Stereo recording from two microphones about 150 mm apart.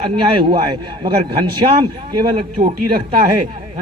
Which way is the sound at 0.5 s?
35° right (ahead or behind).